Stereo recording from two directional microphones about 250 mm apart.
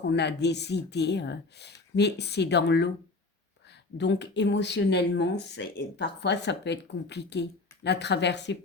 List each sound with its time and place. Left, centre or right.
0.1 s speech: left
3.9 s speech: left